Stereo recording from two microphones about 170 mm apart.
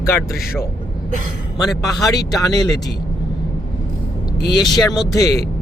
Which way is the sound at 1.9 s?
20° left (ahead or behind).